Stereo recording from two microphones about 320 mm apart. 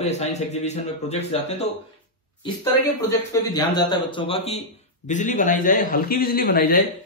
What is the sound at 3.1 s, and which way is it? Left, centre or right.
A man's voice, centre.